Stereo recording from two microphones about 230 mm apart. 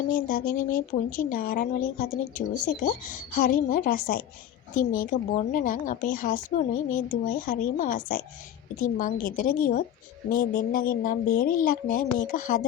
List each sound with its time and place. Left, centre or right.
0.1 s speech: left